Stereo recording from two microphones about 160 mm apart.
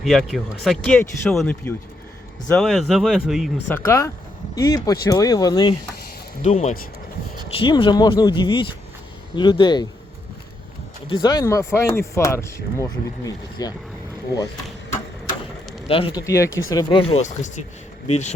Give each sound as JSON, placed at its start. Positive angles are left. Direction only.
{"t": 0.0, "sound": "speech", "side_deg": 0}
{"t": 3.7, "sound": "speech", "side_deg": 15}
{"t": 6.4, "sound": "speech", "side_deg": 45}
{"t": 7.4, "sound": "speech", "side_deg": 35}
{"t": 11.1, "sound": "speech", "side_deg": 25}
{"t": 15.9, "sound": "speech", "side_deg": 35}
{"t": 16.2, "sound": "speech", "side_deg": 20}
{"t": 17.0, "sound": "speech", "side_deg": 40}